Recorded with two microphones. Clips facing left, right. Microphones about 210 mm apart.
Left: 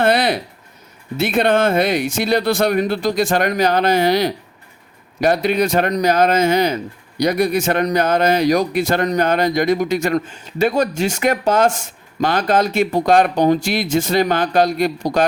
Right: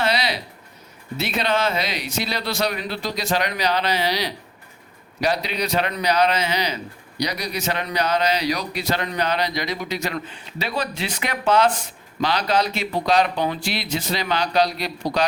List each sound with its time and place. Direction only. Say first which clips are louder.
0.0 s a man's voice: left 7 dB; 50° left (ahead or behind)